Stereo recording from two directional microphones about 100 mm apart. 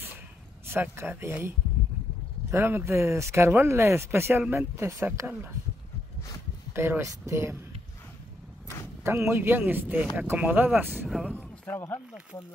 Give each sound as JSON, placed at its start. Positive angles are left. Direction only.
{"t": 0.7, "sound": "speech", "side_deg": -25}
{"t": 2.5, "sound": "speech", "side_deg": -25}
{"t": 6.7, "sound": "speech", "side_deg": -25}
{"t": 9.0, "sound": "speech", "side_deg": -25}
{"t": 11.1, "sound": "speech", "side_deg": -5}
{"t": 11.3, "sound": "a sound", "side_deg": 15}